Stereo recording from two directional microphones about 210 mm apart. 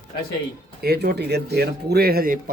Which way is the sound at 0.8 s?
50° right (ahead or behind).